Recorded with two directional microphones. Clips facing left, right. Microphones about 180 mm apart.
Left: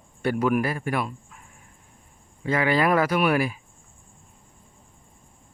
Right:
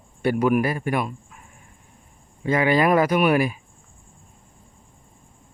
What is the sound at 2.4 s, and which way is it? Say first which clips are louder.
Speech: right 3 dB; 20° right (ahead or behind).